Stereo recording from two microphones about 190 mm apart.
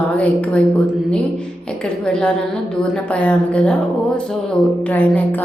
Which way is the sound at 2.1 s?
5° left (ahead or behind).